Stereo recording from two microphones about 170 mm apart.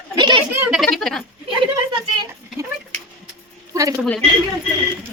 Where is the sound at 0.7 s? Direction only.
Centre (ahead or behind).